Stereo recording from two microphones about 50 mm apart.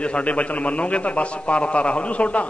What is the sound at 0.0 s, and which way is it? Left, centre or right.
A man's voice, left.